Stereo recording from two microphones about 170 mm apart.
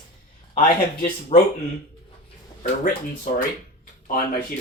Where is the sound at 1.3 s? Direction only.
35° left (ahead or behind).